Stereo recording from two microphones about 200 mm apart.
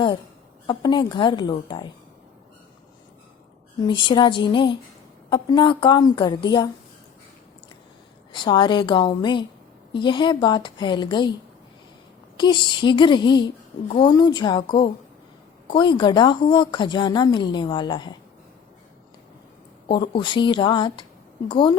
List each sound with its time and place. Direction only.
0.7 s a woman's voice: 20° left (ahead or behind)
3.8 s a woman's voice: 25° left (ahead or behind)
8.3 s a woman's voice: 25° left (ahead or behind)
12.4 s a woman's voice: 25° left (ahead or behind)
19.9 s a woman's voice: 25° left (ahead or behind)